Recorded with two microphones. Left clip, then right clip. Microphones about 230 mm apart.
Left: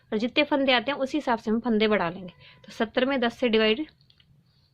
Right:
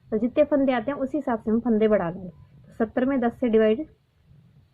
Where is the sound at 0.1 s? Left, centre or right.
Left.